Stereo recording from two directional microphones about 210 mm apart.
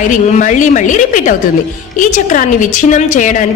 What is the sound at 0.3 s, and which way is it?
A woman's voice, 35° left (ahead or behind).